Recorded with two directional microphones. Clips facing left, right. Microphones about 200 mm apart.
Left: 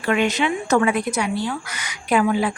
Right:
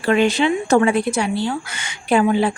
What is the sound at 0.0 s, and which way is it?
Speech, 30° right (ahead or behind).